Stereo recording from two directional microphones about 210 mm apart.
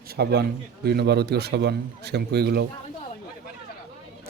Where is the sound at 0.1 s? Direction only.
50° right (ahead or behind).